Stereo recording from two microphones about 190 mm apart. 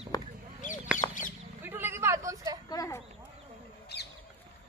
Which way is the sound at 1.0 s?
45° left (ahead or behind).